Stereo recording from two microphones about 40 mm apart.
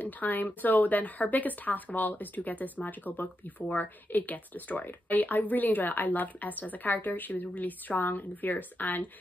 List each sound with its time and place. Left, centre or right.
0.0 s speech: left